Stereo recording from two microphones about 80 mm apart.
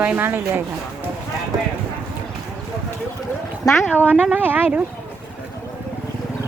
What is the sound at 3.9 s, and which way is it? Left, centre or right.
Speech, right.